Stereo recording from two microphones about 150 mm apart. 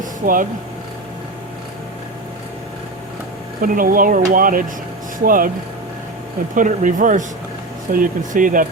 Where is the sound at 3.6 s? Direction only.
70° right (ahead or behind).